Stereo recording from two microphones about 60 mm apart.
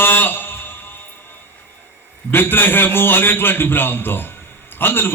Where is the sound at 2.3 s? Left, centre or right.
Left.